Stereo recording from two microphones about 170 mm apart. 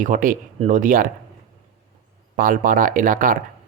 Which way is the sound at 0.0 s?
55° right (ahead or behind).